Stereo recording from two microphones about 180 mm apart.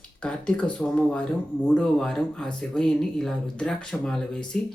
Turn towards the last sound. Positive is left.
turn(degrees=5)  # may be behind; listen again after turning